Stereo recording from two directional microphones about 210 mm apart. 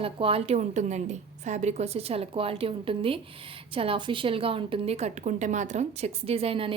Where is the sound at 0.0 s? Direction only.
25° right (ahead or behind).